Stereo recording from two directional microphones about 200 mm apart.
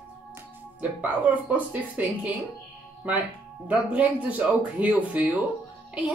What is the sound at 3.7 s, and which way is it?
A woman's voice, 5° right (ahead or behind).